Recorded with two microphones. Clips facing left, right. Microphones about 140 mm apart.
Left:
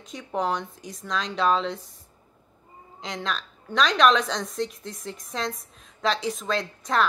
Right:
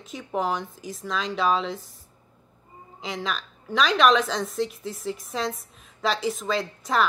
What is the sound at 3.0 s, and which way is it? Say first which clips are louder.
A woman's voice: right 1 dB; 5° right (ahead or behind).